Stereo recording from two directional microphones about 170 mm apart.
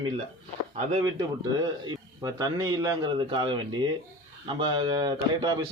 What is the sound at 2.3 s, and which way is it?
A man's voice, 25° right (ahead or behind).